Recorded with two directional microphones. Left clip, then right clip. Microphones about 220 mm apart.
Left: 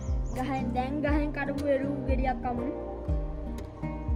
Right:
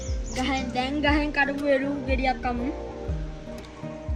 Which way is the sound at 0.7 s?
5° right (ahead or behind).